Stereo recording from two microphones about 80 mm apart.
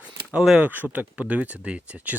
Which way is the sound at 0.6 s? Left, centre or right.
Right.